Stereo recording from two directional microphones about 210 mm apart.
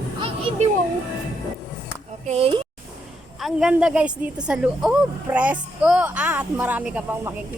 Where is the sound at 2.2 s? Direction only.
30° right (ahead or behind).